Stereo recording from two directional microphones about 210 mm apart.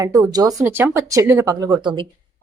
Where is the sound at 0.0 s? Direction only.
15° right (ahead or behind).